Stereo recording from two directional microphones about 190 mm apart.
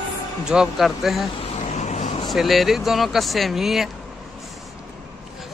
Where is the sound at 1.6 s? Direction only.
35° left (ahead or behind).